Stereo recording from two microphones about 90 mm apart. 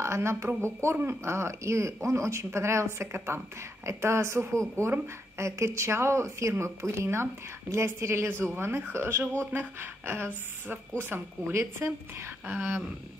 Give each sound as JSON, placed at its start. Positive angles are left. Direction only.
{"t": 0.0, "sound": "a woman's voice", "side_deg": -30}